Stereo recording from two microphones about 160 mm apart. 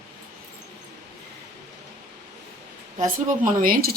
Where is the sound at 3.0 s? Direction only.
55° right (ahead or behind).